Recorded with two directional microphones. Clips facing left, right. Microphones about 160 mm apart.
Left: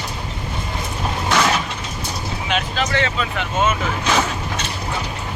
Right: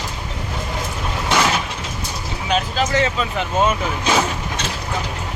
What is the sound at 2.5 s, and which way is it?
Vehicle, 35° right (ahead or behind).